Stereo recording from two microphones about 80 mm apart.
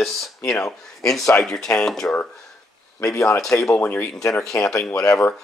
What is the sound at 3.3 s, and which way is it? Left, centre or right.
Speech, left.